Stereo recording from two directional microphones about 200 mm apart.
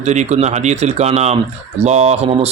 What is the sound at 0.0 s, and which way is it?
Speech, 35° right (ahead or behind).